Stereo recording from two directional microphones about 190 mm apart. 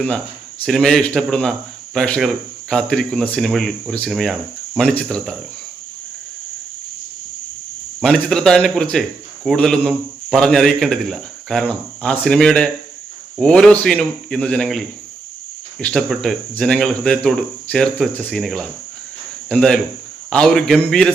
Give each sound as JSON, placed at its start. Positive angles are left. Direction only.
{"t": 0.6, "sound": "speech", "side_deg": 5}
{"t": 8.0, "sound": "speech", "side_deg": 5}